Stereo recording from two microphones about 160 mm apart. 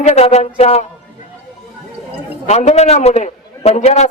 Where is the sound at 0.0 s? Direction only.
40° left (ahead or behind).